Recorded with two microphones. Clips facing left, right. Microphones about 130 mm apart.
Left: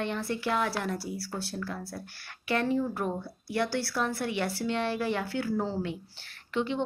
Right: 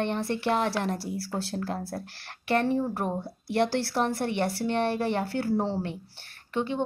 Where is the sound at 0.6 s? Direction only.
25° right (ahead or behind).